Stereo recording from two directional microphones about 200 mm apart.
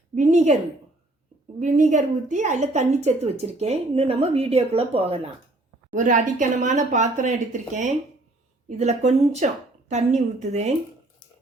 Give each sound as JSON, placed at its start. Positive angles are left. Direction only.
{"t": 0.2, "sound": "a woman's voice", "side_deg": -35}
{"t": 1.5, "sound": "a woman's voice", "side_deg": -40}
{"t": 5.9, "sound": "a woman's voice", "side_deg": -40}